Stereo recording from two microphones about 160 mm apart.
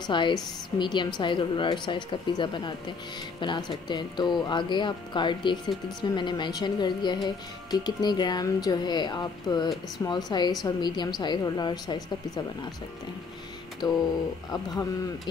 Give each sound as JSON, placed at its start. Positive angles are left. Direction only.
{"t": 0.0, "sound": "a woman's voice", "side_deg": 30}
{"t": 13.8, "sound": "a woman's voice", "side_deg": 25}